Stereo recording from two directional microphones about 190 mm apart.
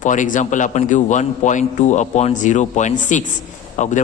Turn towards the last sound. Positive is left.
turn(degrees=40)  # may be behind; listen again after turning